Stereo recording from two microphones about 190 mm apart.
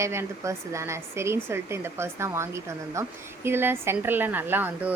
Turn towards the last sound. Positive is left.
turn(degrees=-10)  # may be behind; listen again after turning